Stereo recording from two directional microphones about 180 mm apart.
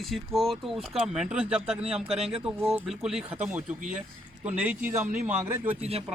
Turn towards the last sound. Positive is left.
turn(degrees=-35)  # may be behind; listen again after turning